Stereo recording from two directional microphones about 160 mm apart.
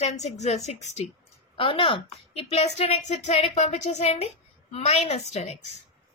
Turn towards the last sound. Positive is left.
turn(degrees=45)  # may be behind; listen again after turning